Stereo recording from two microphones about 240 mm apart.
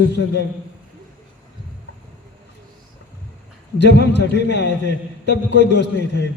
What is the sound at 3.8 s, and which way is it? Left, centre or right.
A man's voice, left.